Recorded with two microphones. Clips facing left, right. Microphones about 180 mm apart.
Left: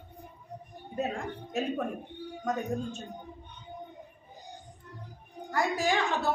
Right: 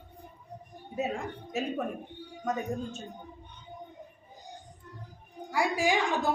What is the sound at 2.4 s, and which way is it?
Speech, centre (ahead or behind).